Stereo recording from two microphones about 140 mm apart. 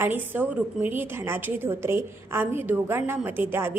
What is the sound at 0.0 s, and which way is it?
A woman's voice, 15° right (ahead or behind).